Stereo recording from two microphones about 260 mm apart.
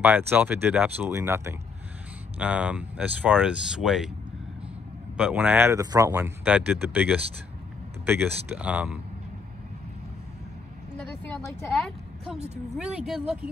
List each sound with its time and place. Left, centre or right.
0.0 s speech: centre
5.1 s speech: centre
11.0 s a woman's voice: centre
12.4 s speech: right
12.7 s speech: centre